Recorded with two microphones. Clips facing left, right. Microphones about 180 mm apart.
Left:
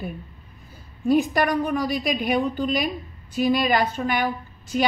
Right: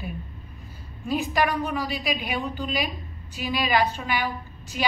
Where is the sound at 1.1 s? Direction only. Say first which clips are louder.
Left 5 dB; 50° left (ahead or behind).